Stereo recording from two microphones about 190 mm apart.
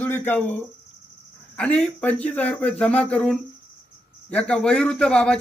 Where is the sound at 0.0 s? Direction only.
10° left (ahead or behind).